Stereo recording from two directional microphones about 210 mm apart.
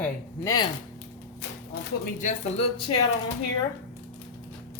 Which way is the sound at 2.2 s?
30° left (ahead or behind).